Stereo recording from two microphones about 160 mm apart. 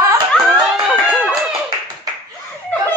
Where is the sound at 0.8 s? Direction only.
10° right (ahead or behind).